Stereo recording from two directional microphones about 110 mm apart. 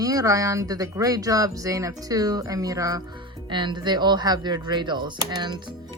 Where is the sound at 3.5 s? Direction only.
45° right (ahead or behind).